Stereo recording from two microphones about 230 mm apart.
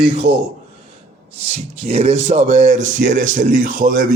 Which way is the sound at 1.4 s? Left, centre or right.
Right.